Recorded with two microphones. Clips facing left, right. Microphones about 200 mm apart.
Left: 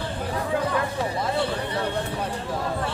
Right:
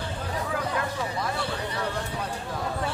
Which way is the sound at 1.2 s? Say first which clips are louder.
Left 5 dB; 25° left (ahead or behind).